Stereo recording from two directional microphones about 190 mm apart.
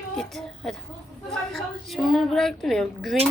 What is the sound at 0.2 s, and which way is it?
A woman's voice, centre (ahead or behind).